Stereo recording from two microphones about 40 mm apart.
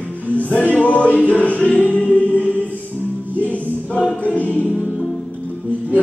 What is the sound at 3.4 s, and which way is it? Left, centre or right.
Music, left.